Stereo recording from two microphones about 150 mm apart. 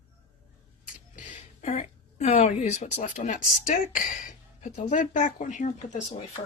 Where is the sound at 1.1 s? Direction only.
45° left (ahead or behind).